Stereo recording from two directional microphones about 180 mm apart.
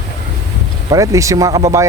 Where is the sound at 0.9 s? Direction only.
15° right (ahead or behind).